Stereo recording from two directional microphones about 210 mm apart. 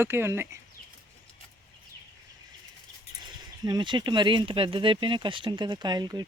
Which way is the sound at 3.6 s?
20° right (ahead or behind).